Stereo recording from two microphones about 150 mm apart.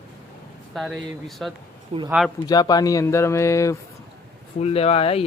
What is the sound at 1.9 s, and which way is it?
Speech, 45° right (ahead or behind).